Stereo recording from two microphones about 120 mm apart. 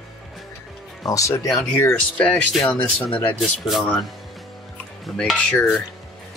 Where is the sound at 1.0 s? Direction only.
25° left (ahead or behind).